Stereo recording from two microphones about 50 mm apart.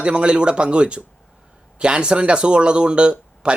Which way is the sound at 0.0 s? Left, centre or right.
Right.